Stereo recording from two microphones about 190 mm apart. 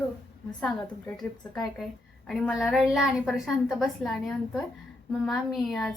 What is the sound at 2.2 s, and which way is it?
A woman's voice, centre (ahead or behind).